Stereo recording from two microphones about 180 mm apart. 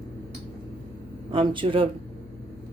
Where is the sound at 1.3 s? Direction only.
30° right (ahead or behind).